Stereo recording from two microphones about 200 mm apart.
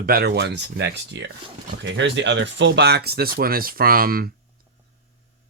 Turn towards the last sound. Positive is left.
turn(degrees=-50)  # may be behind; listen again after turning